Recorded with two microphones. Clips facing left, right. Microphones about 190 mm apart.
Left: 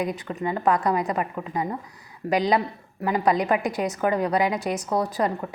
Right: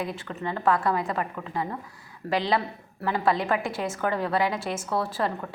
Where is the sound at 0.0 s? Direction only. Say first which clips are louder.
Left 4 dB; 15° left (ahead or behind).